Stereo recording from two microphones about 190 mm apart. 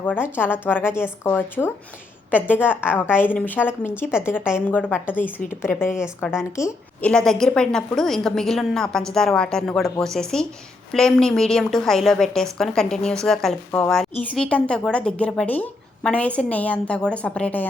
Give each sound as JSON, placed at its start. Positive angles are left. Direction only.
{"t": 0.0, "sound": "speech", "side_deg": 10}
{"t": 2.6, "sound": "a woman's voice", "side_deg": -5}
{"t": 3.1, "sound": "a woman's voice", "side_deg": 10}
{"t": 7.1, "sound": "a woman's voice", "side_deg": 5}